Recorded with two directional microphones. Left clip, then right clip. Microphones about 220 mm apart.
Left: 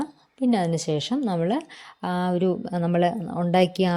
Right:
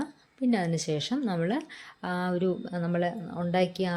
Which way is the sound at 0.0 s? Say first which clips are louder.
Left 5 dB; 25° left (ahead or behind).